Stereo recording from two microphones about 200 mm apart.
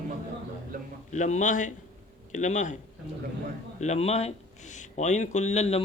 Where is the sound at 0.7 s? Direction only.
45° right (ahead or behind).